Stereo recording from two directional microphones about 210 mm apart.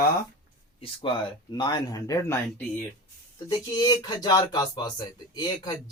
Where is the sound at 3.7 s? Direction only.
20° left (ahead or behind).